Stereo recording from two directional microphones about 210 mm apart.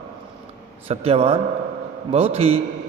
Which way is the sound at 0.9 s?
25° right (ahead or behind).